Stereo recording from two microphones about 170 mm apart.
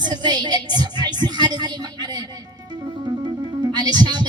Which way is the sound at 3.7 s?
25° right (ahead or behind).